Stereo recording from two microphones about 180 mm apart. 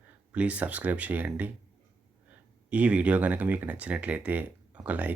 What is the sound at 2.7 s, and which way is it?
Speech, 10° right (ahead or behind).